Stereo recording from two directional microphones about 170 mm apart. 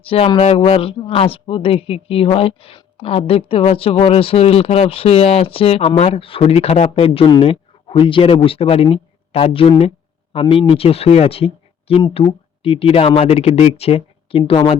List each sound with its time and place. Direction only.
0.0 s speech: 35° left (ahead or behind)